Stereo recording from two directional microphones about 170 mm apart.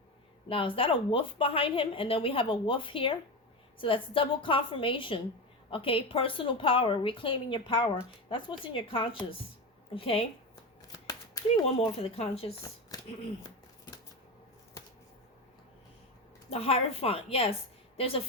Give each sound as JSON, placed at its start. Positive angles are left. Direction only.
{"t": 0.4, "sound": "a woman's voice", "side_deg": 30}
{"t": 11.0, "sound": "shuffling cards", "side_deg": 20}
{"t": 11.4, "sound": "a woman's voice", "side_deg": 35}
{"t": 13.4, "sound": "a sound", "side_deg": 20}
{"t": 16.5, "sound": "a woman's voice", "side_deg": 35}